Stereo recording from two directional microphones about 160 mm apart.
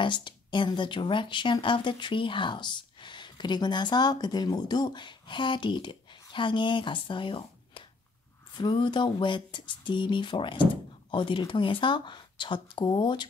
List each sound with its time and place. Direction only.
0.0 s speech: 30° left (ahead or behind)